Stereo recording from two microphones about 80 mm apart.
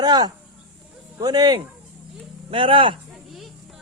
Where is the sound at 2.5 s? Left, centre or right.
Right.